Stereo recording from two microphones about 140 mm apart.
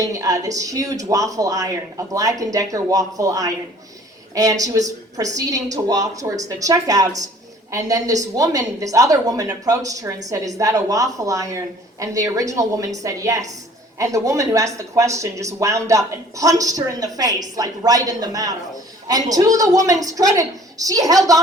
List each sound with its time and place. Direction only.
0.0 s speech: 25° right (ahead or behind)